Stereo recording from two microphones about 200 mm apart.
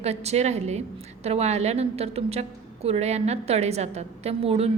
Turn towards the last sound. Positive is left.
turn(degrees=-30)  # may be behind; listen again after turning